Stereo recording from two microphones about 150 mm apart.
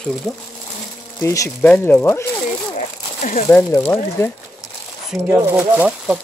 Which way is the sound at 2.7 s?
55° left (ahead or behind).